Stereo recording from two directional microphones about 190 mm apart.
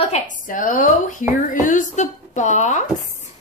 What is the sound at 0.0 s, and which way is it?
A woman's voice, 40° left (ahead or behind).